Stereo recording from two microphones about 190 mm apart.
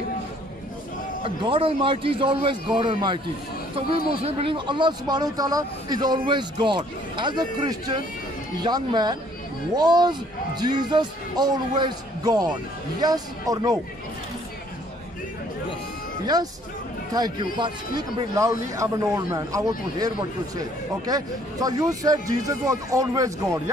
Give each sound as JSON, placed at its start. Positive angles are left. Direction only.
{"t": 1.2, "sound": "speech", "side_deg": -30}
{"t": 17.1, "sound": "a man's voice", "side_deg": -20}